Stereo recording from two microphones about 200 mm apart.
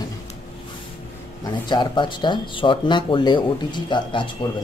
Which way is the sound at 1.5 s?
20° left (ahead or behind).